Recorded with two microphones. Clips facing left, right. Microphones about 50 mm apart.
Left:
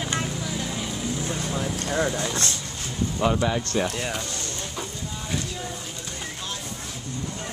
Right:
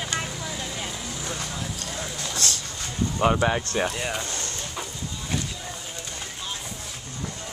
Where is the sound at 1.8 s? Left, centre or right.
Left.